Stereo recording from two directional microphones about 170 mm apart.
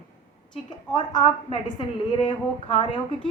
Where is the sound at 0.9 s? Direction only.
25° left (ahead or behind).